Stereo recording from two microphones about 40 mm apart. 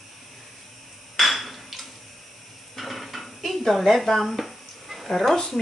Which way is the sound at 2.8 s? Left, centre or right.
Centre.